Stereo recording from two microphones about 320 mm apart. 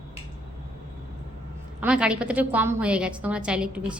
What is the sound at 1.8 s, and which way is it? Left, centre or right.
A woman's voice, centre.